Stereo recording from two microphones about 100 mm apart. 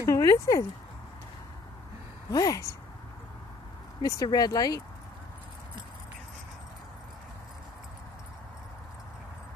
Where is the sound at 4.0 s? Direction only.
40° left (ahead or behind).